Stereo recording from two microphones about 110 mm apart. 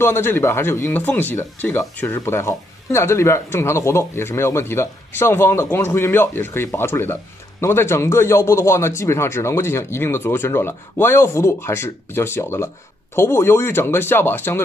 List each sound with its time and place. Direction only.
0.0 s speech: 20° left (ahead or behind)